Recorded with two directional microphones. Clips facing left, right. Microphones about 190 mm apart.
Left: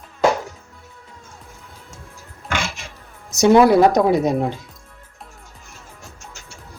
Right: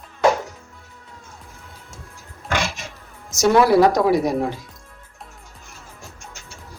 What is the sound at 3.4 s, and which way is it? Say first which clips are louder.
Speech: left 2 dB; 20° left (ahead or behind).